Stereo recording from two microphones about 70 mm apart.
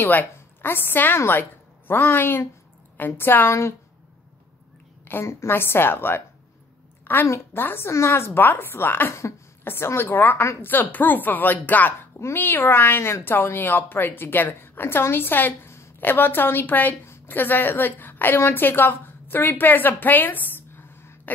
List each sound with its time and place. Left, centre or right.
0.0 s a woman's voice: left
5.2 s speech: left
7.2 s a woman's voice: left